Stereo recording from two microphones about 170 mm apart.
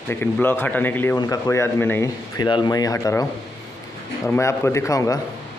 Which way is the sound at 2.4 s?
25° left (ahead or behind).